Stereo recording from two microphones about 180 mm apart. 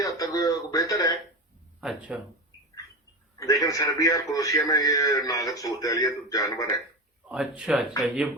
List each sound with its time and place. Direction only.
0.0 s speech: 20° left (ahead or behind)
1.8 s speech: 5° right (ahead or behind)
3.3 s a man's voice: 20° left (ahead or behind)
7.3 s speech: 5° right (ahead or behind)